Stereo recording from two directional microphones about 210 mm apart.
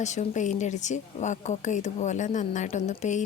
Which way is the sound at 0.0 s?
35° left (ahead or behind).